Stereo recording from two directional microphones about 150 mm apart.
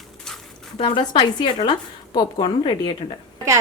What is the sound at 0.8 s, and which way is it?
Speech, 30° left (ahead or behind).